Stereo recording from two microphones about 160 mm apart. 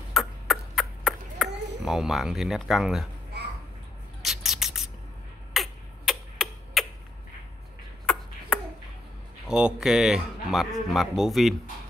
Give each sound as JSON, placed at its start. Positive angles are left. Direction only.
{"t": 0.1, "sound": "ping", "side_deg": 0}
{"t": 4.2, "sound": "a sound", "side_deg": 0}
{"t": 5.5, "sound": "tick-tock", "side_deg": 0}
{"t": 9.5, "sound": "speech", "side_deg": -5}